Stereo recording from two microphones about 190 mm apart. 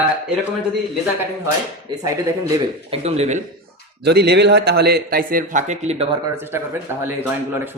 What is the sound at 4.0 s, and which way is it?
A man's voice, 60° right (ahead or behind).